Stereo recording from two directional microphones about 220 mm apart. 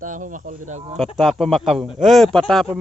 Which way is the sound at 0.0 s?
35° right (ahead or behind).